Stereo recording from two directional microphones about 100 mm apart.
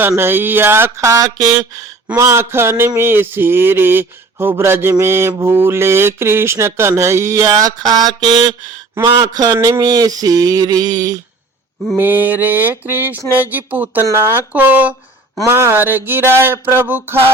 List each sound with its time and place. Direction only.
0.2 s mantra: 20° right (ahead or behind); by 11.2 s 40° right (ahead or behind)
11.9 s mantra: 20° right (ahead or behind)
13.3 s speech: 20° right (ahead or behind)
14.0 s mantra: 25° right (ahead or behind)